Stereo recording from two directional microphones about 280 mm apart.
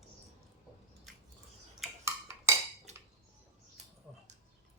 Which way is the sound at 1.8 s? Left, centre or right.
Centre.